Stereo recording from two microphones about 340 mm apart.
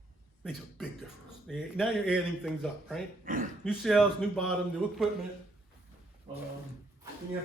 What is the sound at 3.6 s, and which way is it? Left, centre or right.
Speech, centre.